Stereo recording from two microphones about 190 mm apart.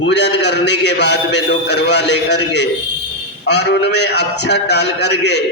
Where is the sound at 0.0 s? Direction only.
65° left (ahead or behind).